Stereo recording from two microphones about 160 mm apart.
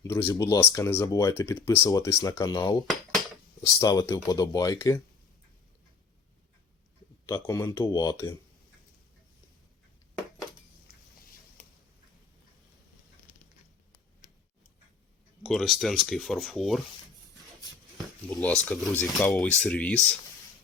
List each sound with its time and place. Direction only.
0.0 s speech: 15° left (ahead or behind)
7.3 s speech: 20° left (ahead or behind)
15.4 s speech: centre (ahead or behind)
18.4 s speech: 5° left (ahead or behind)